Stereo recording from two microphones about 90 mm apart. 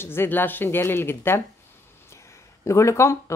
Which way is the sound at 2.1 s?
35° left (ahead or behind).